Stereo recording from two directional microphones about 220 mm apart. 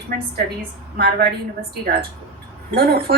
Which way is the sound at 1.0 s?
45° right (ahead or behind).